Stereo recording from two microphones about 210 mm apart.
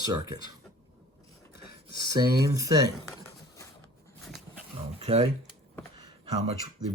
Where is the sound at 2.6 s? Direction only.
15° right (ahead or behind).